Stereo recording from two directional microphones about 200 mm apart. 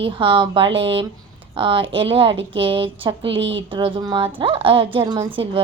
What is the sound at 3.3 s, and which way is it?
Speech, 65° right (ahead or behind).